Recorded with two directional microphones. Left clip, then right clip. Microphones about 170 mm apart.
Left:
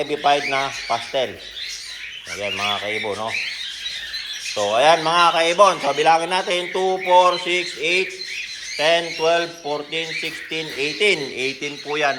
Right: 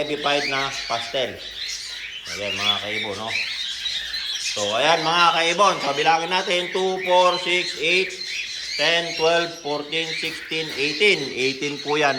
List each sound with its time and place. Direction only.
0.1 s speech: 5° right (ahead or behind)
2.6 s speech: centre (ahead or behind)
4.5 s speech: centre (ahead or behind); by 11.7 s 15° right (ahead or behind)